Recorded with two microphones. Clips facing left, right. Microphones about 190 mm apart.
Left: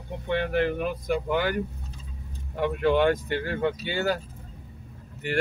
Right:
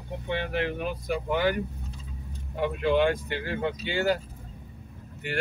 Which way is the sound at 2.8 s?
45° left (ahead or behind).